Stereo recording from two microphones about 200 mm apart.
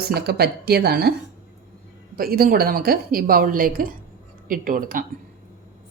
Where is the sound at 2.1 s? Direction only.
45° right (ahead or behind).